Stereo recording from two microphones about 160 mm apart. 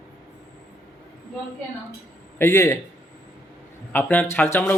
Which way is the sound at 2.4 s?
15° left (ahead or behind).